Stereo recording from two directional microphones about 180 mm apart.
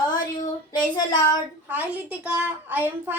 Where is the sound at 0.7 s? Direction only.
25° left (ahead or behind).